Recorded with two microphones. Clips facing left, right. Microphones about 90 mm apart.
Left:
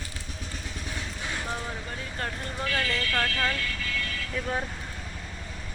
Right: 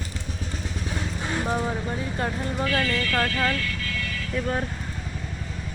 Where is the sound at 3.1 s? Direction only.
10° right (ahead or behind).